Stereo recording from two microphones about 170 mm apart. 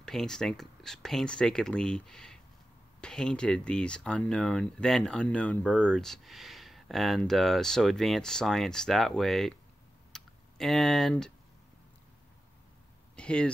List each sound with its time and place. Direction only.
0.0 s speech: 5° left (ahead or behind)
10.1 s typing: centre (ahead or behind)
13.1 s speech: 5° left (ahead or behind)